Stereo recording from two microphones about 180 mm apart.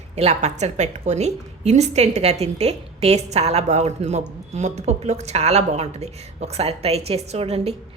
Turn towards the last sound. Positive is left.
turn(degrees=-35)  # may be behind; listen again after turning